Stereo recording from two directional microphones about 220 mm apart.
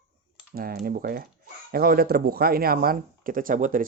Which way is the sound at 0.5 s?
40° right (ahead or behind).